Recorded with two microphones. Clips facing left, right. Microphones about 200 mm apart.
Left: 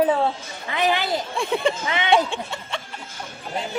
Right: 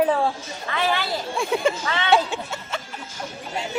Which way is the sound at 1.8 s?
15° left (ahead or behind).